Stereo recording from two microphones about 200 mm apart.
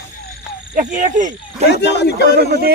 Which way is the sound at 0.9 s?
40° right (ahead or behind).